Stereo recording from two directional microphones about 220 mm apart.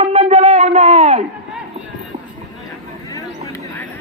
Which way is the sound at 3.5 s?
15° left (ahead or behind).